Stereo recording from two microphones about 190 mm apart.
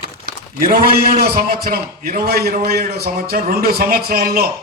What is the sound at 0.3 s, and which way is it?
A man's voice, 50° right (ahead or behind).